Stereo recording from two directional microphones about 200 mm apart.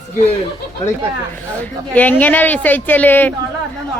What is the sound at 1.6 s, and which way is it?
Speech, 5° left (ahead or behind).